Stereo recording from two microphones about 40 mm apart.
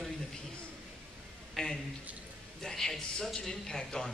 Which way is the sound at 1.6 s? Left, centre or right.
Centre.